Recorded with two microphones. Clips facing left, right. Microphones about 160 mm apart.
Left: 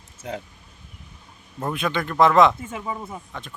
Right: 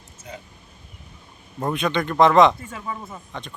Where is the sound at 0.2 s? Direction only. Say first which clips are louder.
Left 7 dB; 90° left.